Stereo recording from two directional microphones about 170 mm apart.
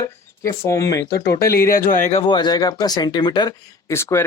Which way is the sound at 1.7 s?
55° left (ahead or behind).